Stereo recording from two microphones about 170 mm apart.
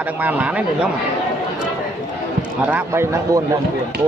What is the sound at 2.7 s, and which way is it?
Speech, 10° right (ahead or behind).